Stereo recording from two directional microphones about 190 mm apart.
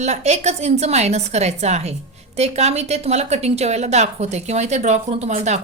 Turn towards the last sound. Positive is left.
turn(degrees=-35)  # may be behind; listen again after turning